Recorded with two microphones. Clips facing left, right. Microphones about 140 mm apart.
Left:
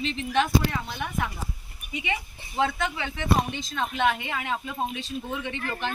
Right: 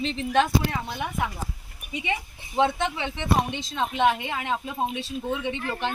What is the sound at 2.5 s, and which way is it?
Speech, 25° right (ahead or behind).